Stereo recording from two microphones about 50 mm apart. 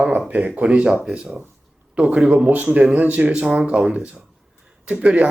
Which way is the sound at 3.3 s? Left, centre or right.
Right.